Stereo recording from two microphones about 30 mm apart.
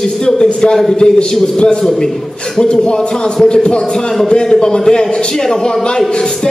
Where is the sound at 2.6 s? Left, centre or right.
Left.